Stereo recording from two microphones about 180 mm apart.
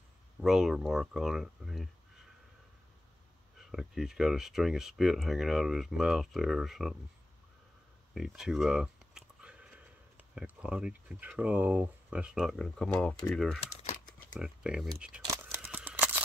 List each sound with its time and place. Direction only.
0.4 s speech: centre (ahead or behind)
3.5 s speech: centre (ahead or behind)
8.1 s speech: centre (ahead or behind)
13.6 s crumpling: 35° left (ahead or behind)
14.4 s speech: 5° right (ahead or behind)
15.2 s camera: 10° right (ahead or behind)